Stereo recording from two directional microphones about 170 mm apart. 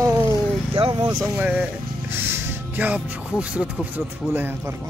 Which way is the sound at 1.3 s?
10° right (ahead or behind).